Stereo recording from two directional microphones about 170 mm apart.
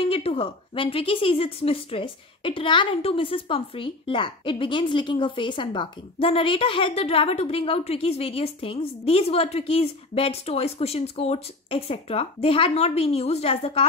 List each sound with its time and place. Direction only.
0.1 s a woman's voice: 35° left (ahead or behind)